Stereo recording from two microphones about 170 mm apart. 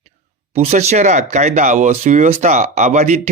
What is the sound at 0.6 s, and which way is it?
Speech, 40° right (ahead or behind).